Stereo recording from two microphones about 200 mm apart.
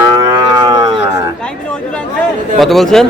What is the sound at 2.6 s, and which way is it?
Speech, centre (ahead or behind).